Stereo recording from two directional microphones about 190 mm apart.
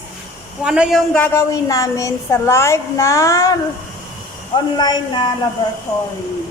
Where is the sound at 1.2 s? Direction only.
15° left (ahead or behind).